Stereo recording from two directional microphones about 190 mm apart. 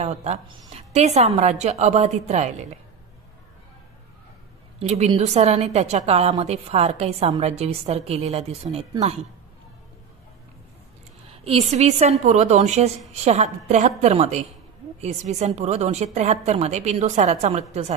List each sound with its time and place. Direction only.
0.0 s a woman's voice: 35° right (ahead or behind)
4.7 s a woman's voice: 35° right (ahead or behind)
11.4 s a woman's voice: 35° right (ahead or behind)